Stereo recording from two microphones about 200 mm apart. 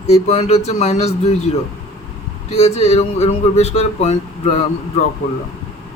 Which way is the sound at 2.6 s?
30° left (ahead or behind).